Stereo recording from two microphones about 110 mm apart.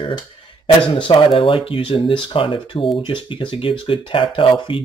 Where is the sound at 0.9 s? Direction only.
50° left (ahead or behind).